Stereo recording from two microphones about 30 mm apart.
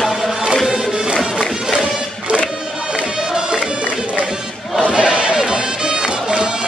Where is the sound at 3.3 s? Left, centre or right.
Right.